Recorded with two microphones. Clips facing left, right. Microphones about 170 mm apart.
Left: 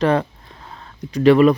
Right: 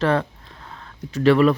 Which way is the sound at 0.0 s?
15° left (ahead or behind).